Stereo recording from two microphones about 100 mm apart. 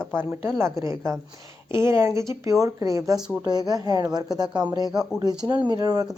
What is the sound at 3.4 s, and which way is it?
Speech, 40° right (ahead or behind).